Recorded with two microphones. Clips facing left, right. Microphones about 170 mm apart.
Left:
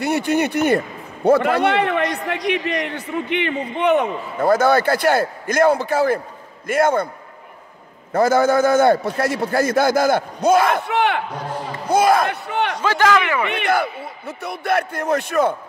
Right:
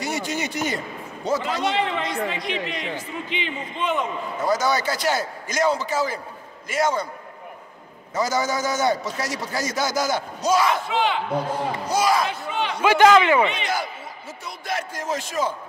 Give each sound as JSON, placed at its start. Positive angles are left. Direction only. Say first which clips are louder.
{"t": 0.0, "sound": "a man's voice", "louder": "left 8 dB", "side_deg": 60}
{"t": 8.1, "sound": "a man's voice", "louder": "left 8 dB", "side_deg": 55}
{"t": 12.8, "sound": "a man's voice", "louder": "right 4 dB", "side_deg": -20}
{"t": 13.5, "sound": "a man's voice", "louder": "left 7 dB", "side_deg": 60}